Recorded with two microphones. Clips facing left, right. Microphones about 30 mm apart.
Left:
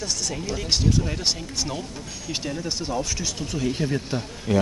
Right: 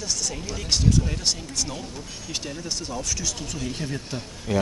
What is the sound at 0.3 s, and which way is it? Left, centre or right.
Speech, centre.